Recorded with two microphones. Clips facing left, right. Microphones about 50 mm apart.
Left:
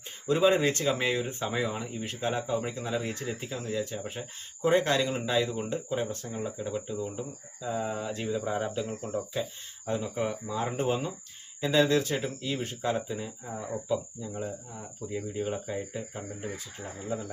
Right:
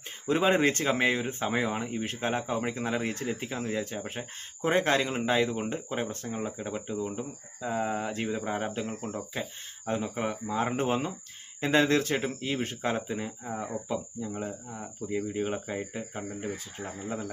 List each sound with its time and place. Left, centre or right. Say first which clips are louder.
0.3 s speech: even; right